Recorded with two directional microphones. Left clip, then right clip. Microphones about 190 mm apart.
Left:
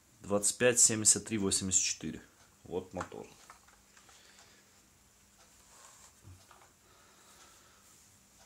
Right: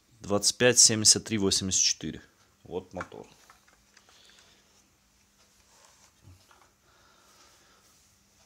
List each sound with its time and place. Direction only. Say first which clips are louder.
0.2 s speech: right 5 dB; 40° right (ahead or behind)